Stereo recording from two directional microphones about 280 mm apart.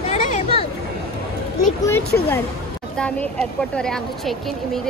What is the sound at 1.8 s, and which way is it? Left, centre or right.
Speech, centre.